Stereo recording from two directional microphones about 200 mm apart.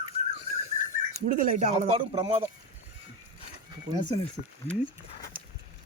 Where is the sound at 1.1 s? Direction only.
40° right (ahead or behind).